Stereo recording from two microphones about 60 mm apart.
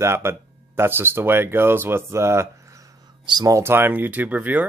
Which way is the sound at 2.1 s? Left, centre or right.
Right.